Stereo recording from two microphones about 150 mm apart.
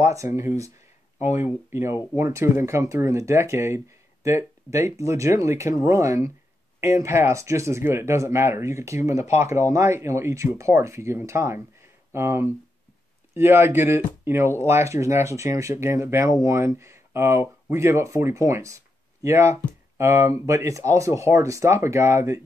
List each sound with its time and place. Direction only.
0.0 s speech: 20° right (ahead or behind)